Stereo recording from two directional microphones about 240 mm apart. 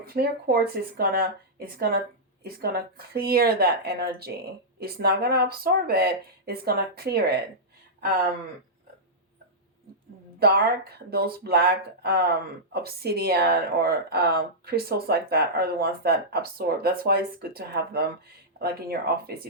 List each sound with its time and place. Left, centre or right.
0.0 s speech: right
10.4 s speech: right